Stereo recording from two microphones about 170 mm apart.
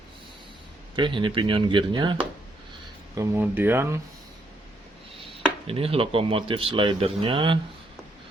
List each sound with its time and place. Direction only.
0.9 s speech: 30° right (ahead or behind)
3.2 s speech: 10° right (ahead or behind)
5.1 s speech: 30° right (ahead or behind)